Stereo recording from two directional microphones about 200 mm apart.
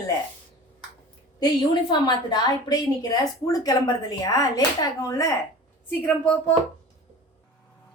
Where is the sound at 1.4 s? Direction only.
20° left (ahead or behind).